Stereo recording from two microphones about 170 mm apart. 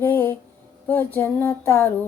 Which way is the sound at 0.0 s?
10° left (ahead or behind).